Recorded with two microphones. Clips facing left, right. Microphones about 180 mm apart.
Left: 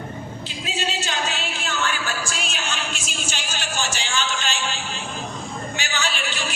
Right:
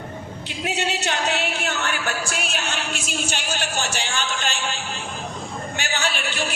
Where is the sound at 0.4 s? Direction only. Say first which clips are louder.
Right 4 dB; 65° right (ahead or behind).